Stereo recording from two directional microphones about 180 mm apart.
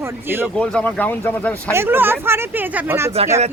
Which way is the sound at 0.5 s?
5° left (ahead or behind).